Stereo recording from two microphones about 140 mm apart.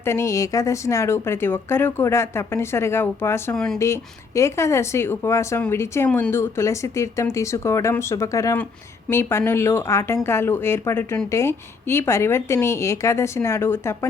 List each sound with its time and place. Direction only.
0.0 s speech: 20° left (ahead or behind)
3.5 s speech: 5° left (ahead or behind)
4.4 s a woman's voice: 20° left (ahead or behind)